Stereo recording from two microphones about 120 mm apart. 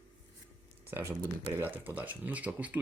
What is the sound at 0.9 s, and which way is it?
Speech, 20° right (ahead or behind).